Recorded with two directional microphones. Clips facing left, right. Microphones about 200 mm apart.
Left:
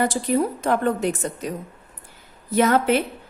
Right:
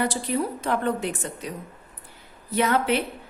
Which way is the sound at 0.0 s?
45° left (ahead or behind).